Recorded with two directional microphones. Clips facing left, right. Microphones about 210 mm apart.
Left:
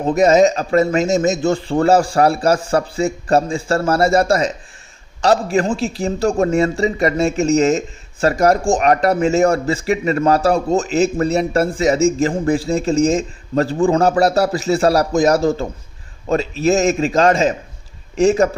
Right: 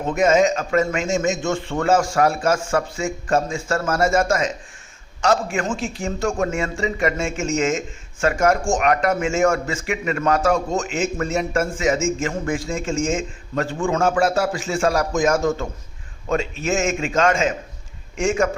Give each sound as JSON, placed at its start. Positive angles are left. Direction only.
{"t": 0.0, "sound": "a man's voice", "side_deg": 35}